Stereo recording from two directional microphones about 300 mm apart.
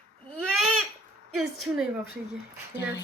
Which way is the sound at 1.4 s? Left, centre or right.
Centre.